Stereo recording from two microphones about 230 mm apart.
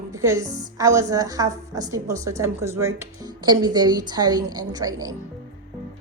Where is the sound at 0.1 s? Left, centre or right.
Centre.